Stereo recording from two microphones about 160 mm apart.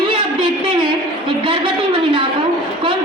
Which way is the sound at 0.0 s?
30° right (ahead or behind).